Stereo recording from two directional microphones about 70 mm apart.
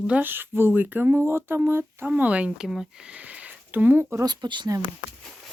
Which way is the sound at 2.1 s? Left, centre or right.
Centre.